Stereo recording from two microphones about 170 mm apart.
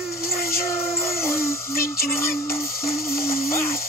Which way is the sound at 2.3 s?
15° left (ahead or behind).